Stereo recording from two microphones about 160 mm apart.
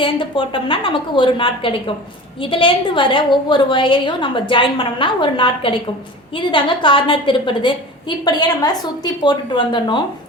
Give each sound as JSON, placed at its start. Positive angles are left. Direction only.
{"t": 0.0, "sound": "a woman's voice", "side_deg": 30}